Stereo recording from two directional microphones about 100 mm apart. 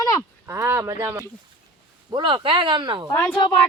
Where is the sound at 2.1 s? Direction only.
50° right (ahead or behind).